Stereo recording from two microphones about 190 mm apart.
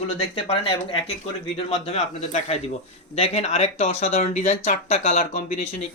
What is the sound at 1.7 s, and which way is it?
Speech, 35° left (ahead or behind).